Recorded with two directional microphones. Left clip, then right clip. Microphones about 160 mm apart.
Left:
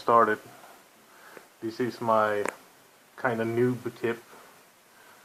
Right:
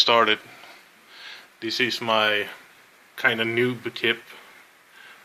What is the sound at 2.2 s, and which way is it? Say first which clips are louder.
Speech: right 4 dB; 35° right (ahead or behind).